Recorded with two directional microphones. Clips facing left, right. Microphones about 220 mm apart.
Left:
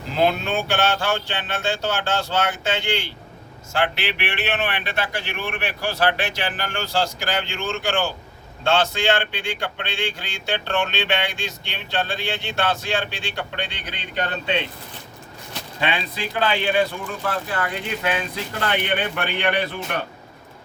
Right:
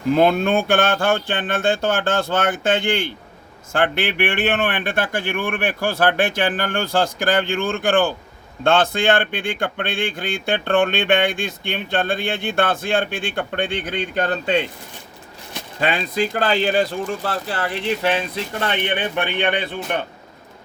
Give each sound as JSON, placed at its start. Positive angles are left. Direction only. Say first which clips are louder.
{"t": 0.2, "sound": "speech", "louder": "right 1 dB", "side_deg": -50}
{"t": 15.8, "sound": "a man's voice", "louder": "right 5 dB", "side_deg": -45}